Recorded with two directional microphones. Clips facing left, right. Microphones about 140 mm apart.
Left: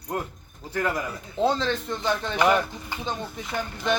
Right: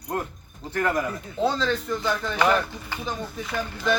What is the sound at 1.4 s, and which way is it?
Speech, 25° left (ahead or behind).